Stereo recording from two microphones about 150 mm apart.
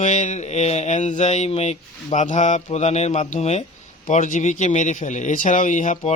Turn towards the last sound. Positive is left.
turn(degrees=55)  # may be behind; listen again after turning